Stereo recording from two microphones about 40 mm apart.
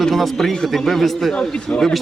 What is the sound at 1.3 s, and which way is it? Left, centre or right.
Speech, left.